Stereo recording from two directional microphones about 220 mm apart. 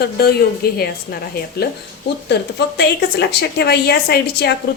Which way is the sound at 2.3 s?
45° left (ahead or behind).